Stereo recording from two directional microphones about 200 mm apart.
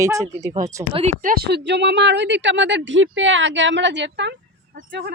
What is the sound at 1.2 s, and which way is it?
Speech, 50° right (ahead or behind).